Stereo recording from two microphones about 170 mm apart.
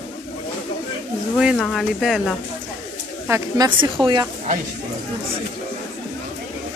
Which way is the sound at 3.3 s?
20° right (ahead or behind).